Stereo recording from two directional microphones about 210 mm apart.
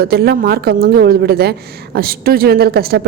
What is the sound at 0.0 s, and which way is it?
A woman's voice, 50° right (ahead or behind).